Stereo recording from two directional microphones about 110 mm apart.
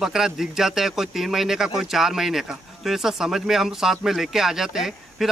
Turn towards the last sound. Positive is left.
turn(degrees=-5)  # may be behind; listen again after turning